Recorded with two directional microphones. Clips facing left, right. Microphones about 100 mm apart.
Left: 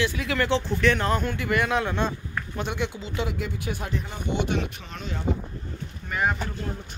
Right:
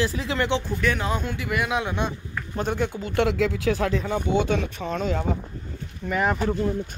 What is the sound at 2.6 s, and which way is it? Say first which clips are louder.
Speech: right 5 dB; 40° right (ahead or behind).